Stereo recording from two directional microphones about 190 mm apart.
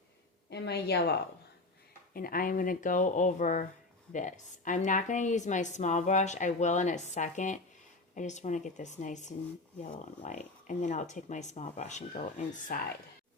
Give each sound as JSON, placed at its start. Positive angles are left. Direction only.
{"t": 0.5, "sound": "a woman's voice", "side_deg": 60}
{"t": 2.1, "sound": "a woman's voice", "side_deg": 50}